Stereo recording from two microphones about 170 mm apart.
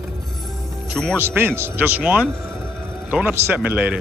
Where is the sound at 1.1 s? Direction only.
15° right (ahead or behind).